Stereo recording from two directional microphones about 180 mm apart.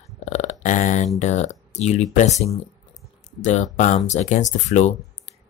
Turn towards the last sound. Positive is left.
turn(degrees=40)  # may be behind; listen again after turning